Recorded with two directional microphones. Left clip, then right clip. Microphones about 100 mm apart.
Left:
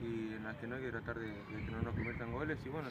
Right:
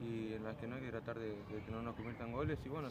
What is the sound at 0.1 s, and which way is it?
Speech, 35° right (ahead or behind).